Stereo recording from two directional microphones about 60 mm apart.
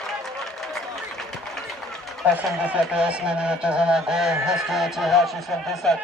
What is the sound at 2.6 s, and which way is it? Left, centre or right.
Speech, centre.